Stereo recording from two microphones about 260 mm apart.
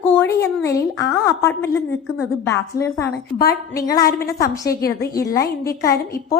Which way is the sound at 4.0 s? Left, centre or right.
Left.